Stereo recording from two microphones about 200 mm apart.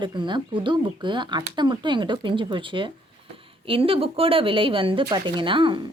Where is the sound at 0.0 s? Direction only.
25° right (ahead or behind).